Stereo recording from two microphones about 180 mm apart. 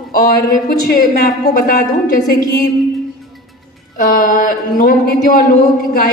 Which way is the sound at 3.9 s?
50° left (ahead or behind).